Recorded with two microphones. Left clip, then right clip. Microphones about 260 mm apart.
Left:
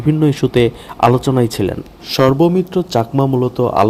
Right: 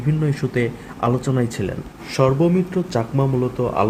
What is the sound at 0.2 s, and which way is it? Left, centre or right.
Speech, centre.